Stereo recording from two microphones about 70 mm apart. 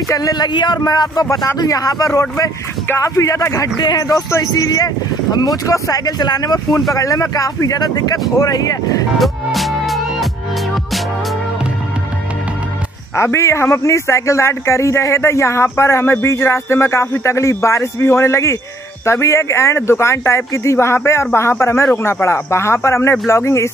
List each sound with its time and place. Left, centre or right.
0.1 s speech: left
3.8 s speech: left
4.3 s speech: left
6.9 s speech: left
9.2 s music: centre
13.1 s a man's voice: left